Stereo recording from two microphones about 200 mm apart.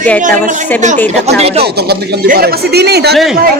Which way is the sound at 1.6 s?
50° right (ahead or behind).